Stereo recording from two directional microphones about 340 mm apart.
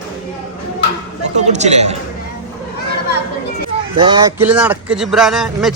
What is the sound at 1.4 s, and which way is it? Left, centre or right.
Speech, centre.